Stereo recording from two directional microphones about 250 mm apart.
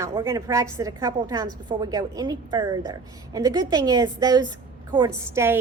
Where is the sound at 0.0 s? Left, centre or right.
Centre.